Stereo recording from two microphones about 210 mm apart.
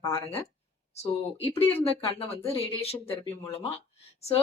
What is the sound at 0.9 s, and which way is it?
Speech, 30° left (ahead or behind).